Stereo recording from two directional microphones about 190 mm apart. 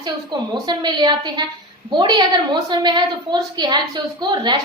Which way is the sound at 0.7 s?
25° right (ahead or behind).